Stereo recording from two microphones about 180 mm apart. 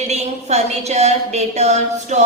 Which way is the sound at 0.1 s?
40° right (ahead or behind).